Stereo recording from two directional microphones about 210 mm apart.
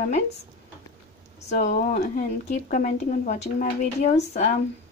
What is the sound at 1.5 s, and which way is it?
Speech, 45° left (ahead or behind).